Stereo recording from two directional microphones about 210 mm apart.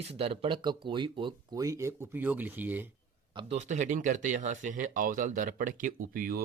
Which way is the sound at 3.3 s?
35° right (ahead or behind).